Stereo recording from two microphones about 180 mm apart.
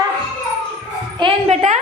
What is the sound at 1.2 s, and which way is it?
Speech, 30° right (ahead or behind).